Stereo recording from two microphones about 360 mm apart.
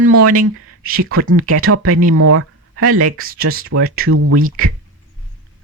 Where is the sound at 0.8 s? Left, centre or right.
Right.